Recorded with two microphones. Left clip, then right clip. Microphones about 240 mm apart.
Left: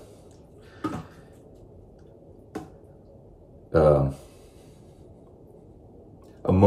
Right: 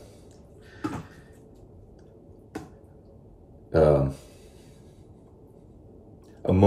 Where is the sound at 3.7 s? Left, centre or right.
Centre.